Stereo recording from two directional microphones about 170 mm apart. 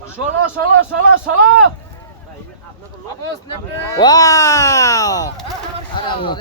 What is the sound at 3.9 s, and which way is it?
A man's voice, 20° left (ahead or behind).